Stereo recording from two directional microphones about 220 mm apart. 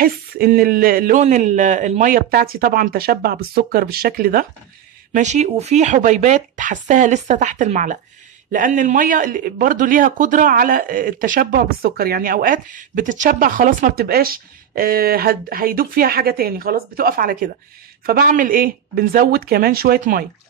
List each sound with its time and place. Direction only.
0.0 s a man's voice: 40° right (ahead or behind)
5.1 s a man's voice: 30° right (ahead or behind)